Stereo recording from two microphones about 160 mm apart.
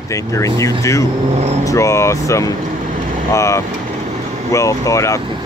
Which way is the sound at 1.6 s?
20° left (ahead or behind).